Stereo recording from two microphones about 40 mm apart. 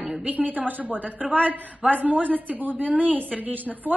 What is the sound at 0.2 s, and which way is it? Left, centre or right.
A woman's voice, right.